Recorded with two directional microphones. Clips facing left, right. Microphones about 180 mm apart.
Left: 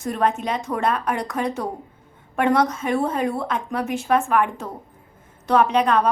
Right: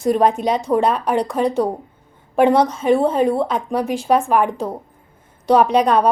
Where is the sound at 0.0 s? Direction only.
35° right (ahead or behind).